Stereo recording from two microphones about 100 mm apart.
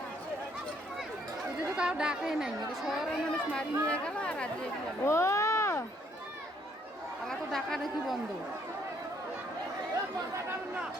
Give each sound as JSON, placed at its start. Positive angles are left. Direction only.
{"t": 1.7, "sound": "a woman's voice", "side_deg": -10}
{"t": 3.1, "sound": "speech", "side_deg": 10}
{"t": 5.0, "sound": "a sound", "side_deg": 30}
{"t": 7.3, "sound": "speech", "side_deg": 5}